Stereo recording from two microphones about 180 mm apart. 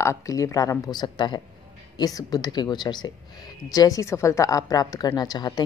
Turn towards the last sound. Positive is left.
turn(degrees=25)  # may be behind; listen again after turning